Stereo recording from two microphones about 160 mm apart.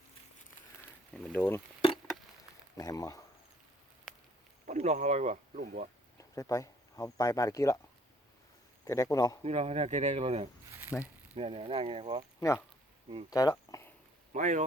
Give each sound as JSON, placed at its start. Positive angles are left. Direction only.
{"t": 1.1, "sound": "speech", "side_deg": 10}
{"t": 2.7, "sound": "a man's voice", "side_deg": 20}
{"t": 4.6, "sound": "speech", "side_deg": -45}
{"t": 6.1, "sound": "speech", "side_deg": 20}
{"t": 8.8, "sound": "a man's voice", "side_deg": 20}
{"t": 9.4, "sound": "speech", "side_deg": -40}
{"t": 10.7, "sound": "a sound", "side_deg": -10}
{"t": 11.3, "sound": "speech", "side_deg": -35}
{"t": 12.4, "sound": "speech", "side_deg": 20}
{"t": 13.3, "sound": "a sound", "side_deg": 20}
{"t": 14.3, "sound": "speech", "side_deg": -50}